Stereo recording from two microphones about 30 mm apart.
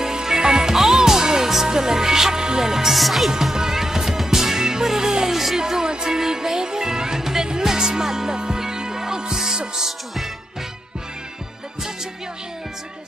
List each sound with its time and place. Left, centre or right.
0.0 s music: centre
3.0 s speech: centre
3.5 s music: centre
5.3 s music: centre
5.6 s music: centre